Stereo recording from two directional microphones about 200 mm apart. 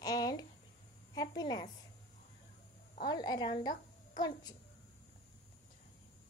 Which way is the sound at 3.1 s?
20° left (ahead or behind).